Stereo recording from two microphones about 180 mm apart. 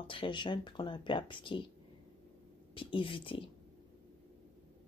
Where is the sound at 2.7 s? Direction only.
30° left (ahead or behind).